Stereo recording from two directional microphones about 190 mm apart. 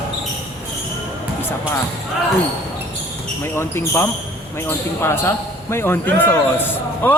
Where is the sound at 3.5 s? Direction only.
15° left (ahead or behind).